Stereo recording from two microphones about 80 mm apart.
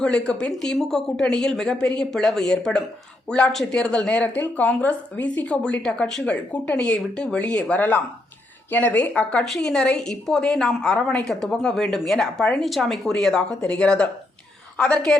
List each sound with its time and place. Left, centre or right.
0.0 s a woman's voice: centre
9.4 s a woman's voice: centre